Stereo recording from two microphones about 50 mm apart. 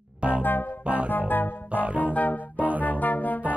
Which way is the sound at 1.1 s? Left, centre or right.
Left.